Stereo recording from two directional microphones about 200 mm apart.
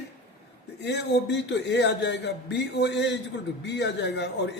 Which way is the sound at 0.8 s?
60° left (ahead or behind).